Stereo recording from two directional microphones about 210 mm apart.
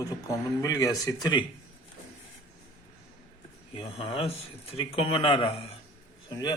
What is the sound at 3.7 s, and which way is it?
Speech, 25° left (ahead or behind).